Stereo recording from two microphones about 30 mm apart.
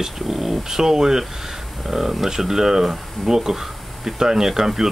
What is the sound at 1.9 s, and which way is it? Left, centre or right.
Speech, centre.